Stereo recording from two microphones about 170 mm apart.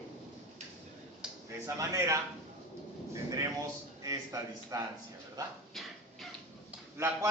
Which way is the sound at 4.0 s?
20° right (ahead or behind).